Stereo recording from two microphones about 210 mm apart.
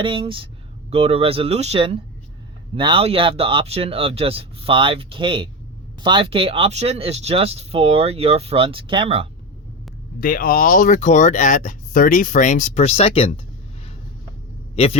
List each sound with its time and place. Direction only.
0.0 s speech: 25° right (ahead or behind)
10.2 s speech: 40° left (ahead or behind); by 13.4 s 25° left (ahead or behind)